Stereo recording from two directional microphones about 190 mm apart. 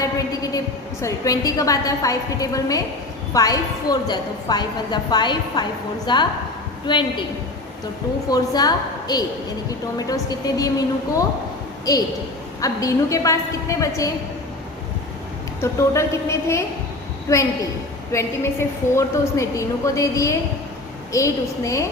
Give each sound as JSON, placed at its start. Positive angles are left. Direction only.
{"t": 0.0, "sound": "a woman's voice", "side_deg": 20}
{"t": 8.3, "sound": "a woman's voice", "side_deg": 20}
{"t": 15.6, "sound": "a woman's voice", "side_deg": 15}
{"t": 18.6, "sound": "a woman's voice", "side_deg": 10}